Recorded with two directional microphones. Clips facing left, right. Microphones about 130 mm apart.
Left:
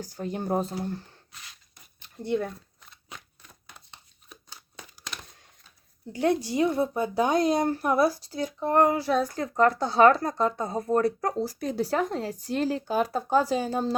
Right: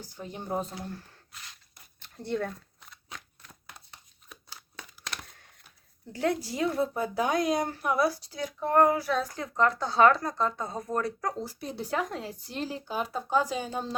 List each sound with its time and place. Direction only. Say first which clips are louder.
0.0 s a woman's voice: left 8 dB; 40° left (ahead or behind)
0.6 s speech: left 6 dB; 35° left (ahead or behind)
2.0 s speech: left 3 dB; 15° left (ahead or behind)
6.1 s a woman's voice: left 5 dB; 20° left (ahead or behind)
8.5 s a woman's voice: left 1 dB; 15° left (ahead or behind)
9.1 s a woman's voice: left 5 dB; 45° left (ahead or behind)
9.8 s a woman's voice: left 2 dB; 25° left (ahead or behind)
10.2 s a woman's voice: left 4 dB; 55° left (ahead or behind)
10.6 s speech: left 7 dB; 35° left (ahead or behind)
11.4 s a woman's voice: left 7 dB; 45° left (ahead or behind)
11.9 s speech: left 4 dB; 35° left (ahead or behind)